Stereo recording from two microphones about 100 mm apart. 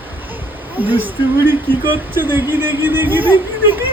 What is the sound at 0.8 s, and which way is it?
Speech, 20° right (ahead or behind).